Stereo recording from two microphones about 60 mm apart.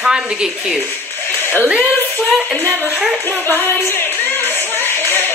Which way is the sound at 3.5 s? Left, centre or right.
Left.